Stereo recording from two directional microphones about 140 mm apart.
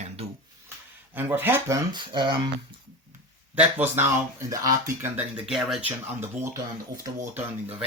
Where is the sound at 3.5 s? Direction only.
15° right (ahead or behind).